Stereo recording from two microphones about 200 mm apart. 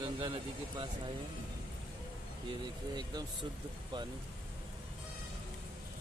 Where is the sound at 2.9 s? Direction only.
20° right (ahead or behind).